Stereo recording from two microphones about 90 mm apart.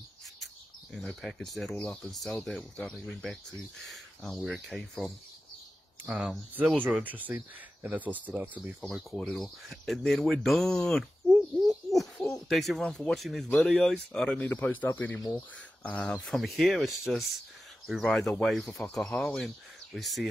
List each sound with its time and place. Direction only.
0.9 s speech: 5° left (ahead or behind)
6.8 s speech: 20° right (ahead or behind)
9.1 s speech: 10° left (ahead or behind)
15.8 s speech: 10° left (ahead or behind)